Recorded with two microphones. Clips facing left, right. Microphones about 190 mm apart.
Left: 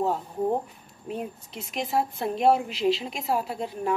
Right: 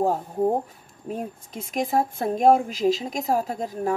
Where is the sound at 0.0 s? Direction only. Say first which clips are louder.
Right 4 dB; 45° right (ahead or behind).